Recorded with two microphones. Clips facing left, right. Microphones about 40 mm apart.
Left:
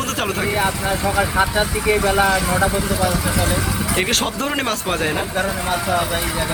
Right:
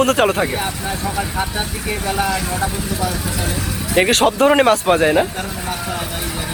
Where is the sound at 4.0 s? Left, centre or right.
Centre.